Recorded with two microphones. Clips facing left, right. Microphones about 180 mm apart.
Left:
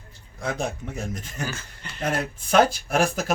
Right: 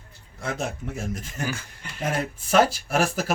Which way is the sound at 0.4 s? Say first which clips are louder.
Left 1 dB; 5° right (ahead or behind).